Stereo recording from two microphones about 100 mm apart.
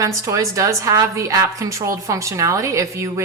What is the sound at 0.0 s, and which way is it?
A woman's voice, 35° right (ahead or behind).